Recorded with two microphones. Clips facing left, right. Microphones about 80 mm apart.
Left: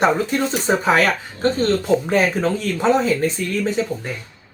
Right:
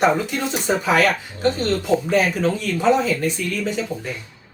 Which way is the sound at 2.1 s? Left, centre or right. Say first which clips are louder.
Left 1 dB; left.